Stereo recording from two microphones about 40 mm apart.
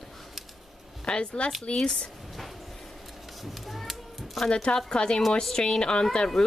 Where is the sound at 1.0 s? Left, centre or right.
Left.